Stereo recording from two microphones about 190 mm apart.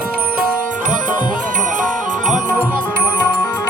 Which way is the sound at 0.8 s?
45° right (ahead or behind).